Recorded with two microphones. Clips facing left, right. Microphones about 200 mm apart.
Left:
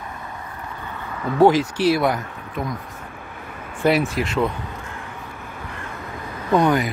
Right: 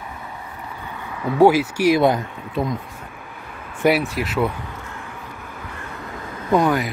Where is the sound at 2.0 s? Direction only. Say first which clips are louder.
Right 4 dB; 25° right (ahead or behind).